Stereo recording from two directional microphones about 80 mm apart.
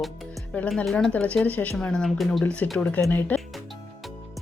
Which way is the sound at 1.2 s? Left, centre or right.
Centre.